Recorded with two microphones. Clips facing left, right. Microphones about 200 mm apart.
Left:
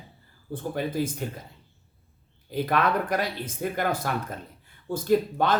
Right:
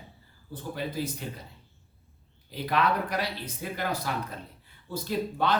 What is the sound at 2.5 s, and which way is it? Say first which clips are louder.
Speech: left 3 dB; 50° left (ahead or behind).